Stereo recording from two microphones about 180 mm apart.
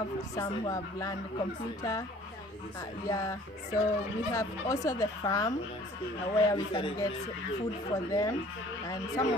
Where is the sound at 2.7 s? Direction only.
20° left (ahead or behind).